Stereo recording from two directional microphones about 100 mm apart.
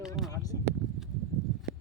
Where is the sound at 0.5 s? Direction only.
30° left (ahead or behind).